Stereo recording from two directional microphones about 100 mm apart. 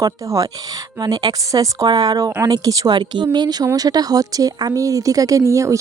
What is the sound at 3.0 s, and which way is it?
A woman's voice, 50° right (ahead or behind).